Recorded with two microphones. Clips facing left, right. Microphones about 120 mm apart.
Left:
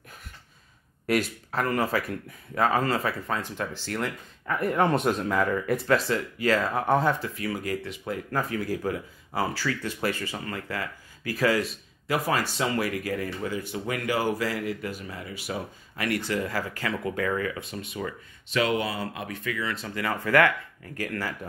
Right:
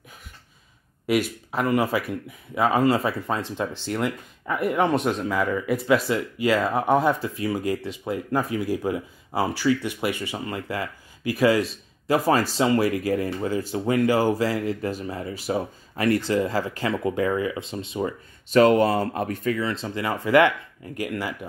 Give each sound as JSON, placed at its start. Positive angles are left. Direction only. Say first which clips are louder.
{"t": 1.0, "sound": "speech", "louder": "right 3 dB", "side_deg": -5}
{"t": 6.0, "sound": "speech", "louder": "right 3 dB", "side_deg": -15}
{"t": 7.2, "sound": "speech", "louder": "right 5 dB", "side_deg": -25}
{"t": 18.5, "sound": "speech", "louder": "right 9 dB", "side_deg": -45}